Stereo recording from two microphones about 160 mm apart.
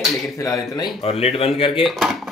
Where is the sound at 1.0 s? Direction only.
40° left (ahead or behind).